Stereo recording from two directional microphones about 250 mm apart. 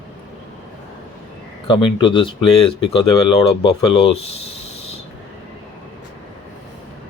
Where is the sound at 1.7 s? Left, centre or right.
Centre.